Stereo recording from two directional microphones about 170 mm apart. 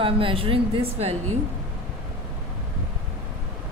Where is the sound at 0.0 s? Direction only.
30° right (ahead or behind).